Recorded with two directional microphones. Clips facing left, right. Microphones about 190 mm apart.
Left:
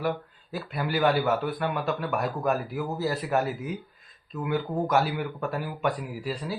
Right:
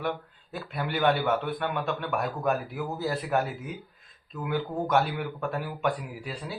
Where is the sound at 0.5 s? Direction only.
Centre (ahead or behind).